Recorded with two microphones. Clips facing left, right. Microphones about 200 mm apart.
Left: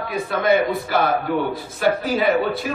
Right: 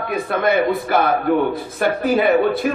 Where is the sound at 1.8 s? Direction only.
55° right (ahead or behind).